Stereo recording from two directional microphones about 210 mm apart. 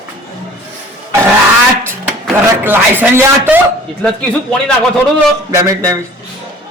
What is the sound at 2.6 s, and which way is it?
Speech, 10° right (ahead or behind).